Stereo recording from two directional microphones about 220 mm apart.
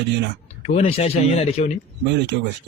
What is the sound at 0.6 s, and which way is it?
Speech, 25° left (ahead or behind).